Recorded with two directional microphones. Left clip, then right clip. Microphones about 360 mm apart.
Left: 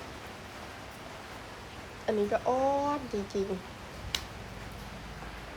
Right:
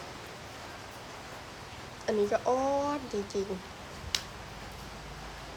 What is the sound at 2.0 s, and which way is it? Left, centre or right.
A child's voice, centre.